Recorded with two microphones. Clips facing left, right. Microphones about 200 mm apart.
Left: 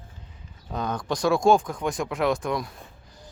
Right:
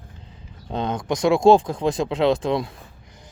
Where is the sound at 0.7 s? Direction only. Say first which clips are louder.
Right 4 dB; 25° right (ahead or behind).